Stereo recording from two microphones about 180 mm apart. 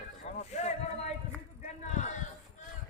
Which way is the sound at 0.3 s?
40° left (ahead or behind).